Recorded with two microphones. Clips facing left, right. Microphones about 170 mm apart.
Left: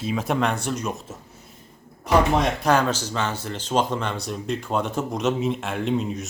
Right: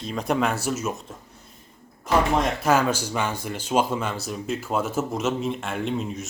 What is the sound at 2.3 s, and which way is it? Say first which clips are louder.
Speech: left 1 dB; 5° right (ahead or behind).